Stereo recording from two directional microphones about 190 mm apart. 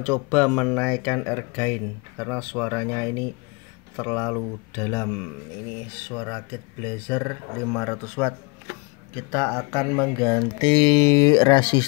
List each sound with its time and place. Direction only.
0.0 s speech: 5° left (ahead or behind); by 11.8 s 20° left (ahead or behind)